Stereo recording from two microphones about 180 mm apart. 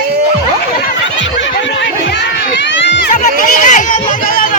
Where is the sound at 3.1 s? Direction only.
45° left (ahead or behind).